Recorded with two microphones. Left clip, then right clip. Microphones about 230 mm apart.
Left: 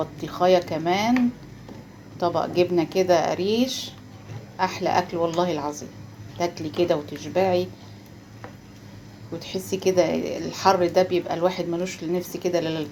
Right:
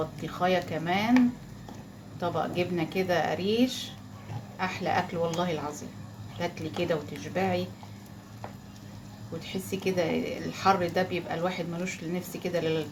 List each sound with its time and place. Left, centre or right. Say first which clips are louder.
0.3 s a woman's voice: left 8 dB; left
2.1 s a woman's voice: left 7 dB; left
9.5 s a woman's voice: left 8 dB; left